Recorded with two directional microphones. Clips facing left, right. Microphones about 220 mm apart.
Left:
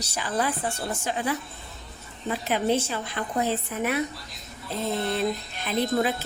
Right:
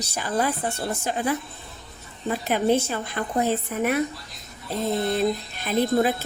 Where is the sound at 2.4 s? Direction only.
50° right (ahead or behind).